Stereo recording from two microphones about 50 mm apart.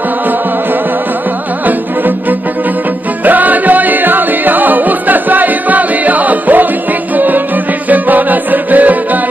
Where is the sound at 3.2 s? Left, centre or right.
Right.